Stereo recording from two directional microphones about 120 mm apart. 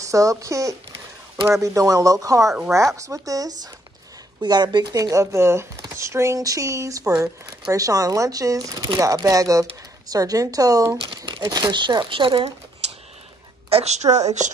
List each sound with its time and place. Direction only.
0.0 s speech: 25° right (ahead or behind)
11.0 s crumpling: 45° right (ahead or behind)
11.4 s speech: 35° right (ahead or behind)
13.7 s a woman's voice: 60° right (ahead or behind)
14.1 s speech: 75° right (ahead or behind)